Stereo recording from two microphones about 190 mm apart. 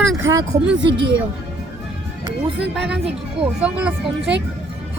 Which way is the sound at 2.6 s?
5° right (ahead or behind).